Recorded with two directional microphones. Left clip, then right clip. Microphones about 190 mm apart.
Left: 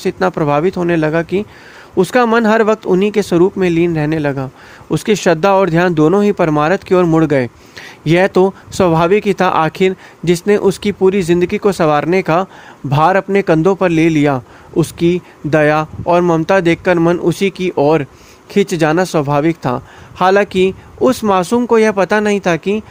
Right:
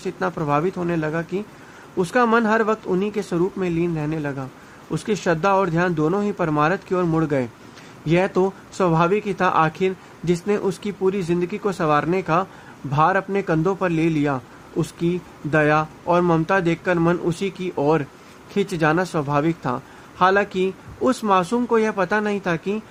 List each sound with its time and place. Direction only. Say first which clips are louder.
0.0 s a man's voice: left 10 dB; 45° left (ahead or behind)